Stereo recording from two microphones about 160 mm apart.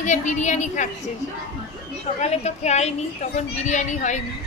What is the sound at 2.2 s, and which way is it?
A woman's voice, 45° left (ahead or behind).